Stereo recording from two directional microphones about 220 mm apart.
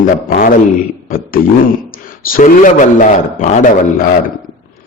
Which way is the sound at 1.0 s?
40° left (ahead or behind).